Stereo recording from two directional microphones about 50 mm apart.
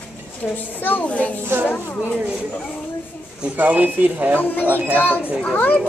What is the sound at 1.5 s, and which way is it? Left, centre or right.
Speech, right.